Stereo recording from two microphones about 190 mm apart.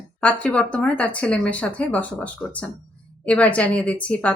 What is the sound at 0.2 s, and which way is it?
A woman's voice, 5° left (ahead or behind).